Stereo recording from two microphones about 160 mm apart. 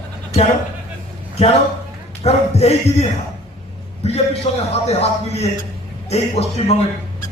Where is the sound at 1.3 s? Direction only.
40° left (ahead or behind).